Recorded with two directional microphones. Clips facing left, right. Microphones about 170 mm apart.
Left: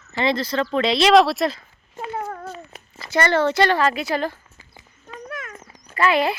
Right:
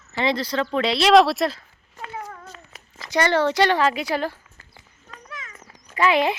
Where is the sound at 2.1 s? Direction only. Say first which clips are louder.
Left 7 dB; 50° left (ahead or behind).